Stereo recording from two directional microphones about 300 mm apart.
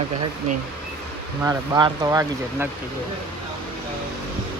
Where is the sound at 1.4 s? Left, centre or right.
Centre.